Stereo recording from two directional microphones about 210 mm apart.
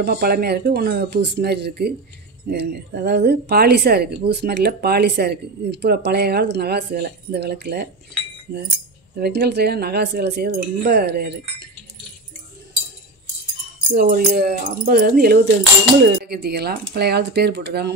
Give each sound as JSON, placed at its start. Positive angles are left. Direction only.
{"t": 0.0, "sound": "speech", "side_deg": -50}
{"t": 9.2, "sound": "speech", "side_deg": -50}
{"t": 13.9, "sound": "speech", "side_deg": -45}